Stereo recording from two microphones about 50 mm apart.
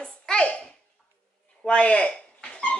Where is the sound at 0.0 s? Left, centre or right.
Centre.